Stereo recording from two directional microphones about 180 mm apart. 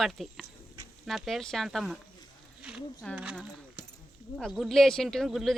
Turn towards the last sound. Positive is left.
turn(degrees=0)  # may be behind; listen again after turning